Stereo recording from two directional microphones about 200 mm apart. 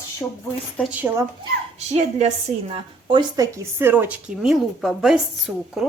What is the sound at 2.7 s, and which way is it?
Speech, 25° right (ahead or behind).